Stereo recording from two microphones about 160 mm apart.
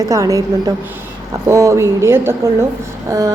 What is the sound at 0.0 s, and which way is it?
A woman's voice, 20° right (ahead or behind).